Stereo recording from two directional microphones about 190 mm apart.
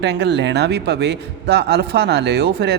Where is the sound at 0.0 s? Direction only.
65° right (ahead or behind).